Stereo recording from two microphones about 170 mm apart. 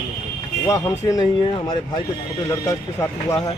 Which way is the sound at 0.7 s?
20° left (ahead or behind).